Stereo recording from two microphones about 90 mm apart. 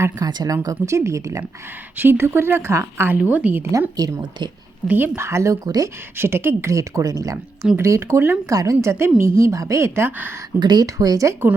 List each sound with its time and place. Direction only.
0.2 s a woman's voice: 45° right (ahead or behind); by 3.2 s 30° right (ahead or behind)
3.2 s a woman's voice: 15° right (ahead or behind)
3.6 s a woman's voice: 40° right (ahead or behind)
4.9 s speech: 20° right (ahead or behind)
5.6 s speech: 45° right (ahead or behind)
6.1 s a woman's voice: 25° right (ahead or behind)
10.6 s speech: 55° right (ahead or behind)
10.8 s a woman's voice: 40° right (ahead or behind)